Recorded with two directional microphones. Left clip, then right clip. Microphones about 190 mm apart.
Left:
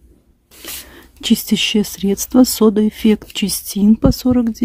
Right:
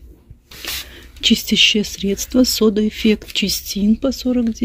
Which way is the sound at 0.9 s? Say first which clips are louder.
Right 2 dB; 20° left (ahead or behind).